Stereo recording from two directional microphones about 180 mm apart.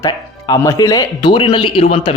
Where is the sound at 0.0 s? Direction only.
20° left (ahead or behind).